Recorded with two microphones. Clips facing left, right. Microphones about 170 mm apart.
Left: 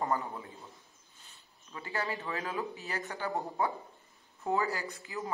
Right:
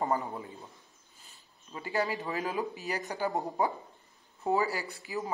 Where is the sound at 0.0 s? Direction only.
20° right (ahead or behind).